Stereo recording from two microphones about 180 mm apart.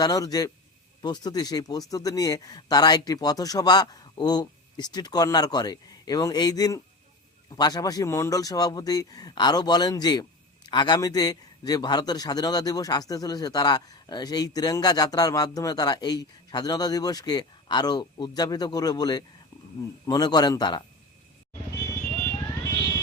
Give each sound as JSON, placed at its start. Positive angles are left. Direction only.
{"t": 0.0, "sound": "a man's voice", "side_deg": 20}
{"t": 21.7, "sound": "vehicle", "side_deg": 15}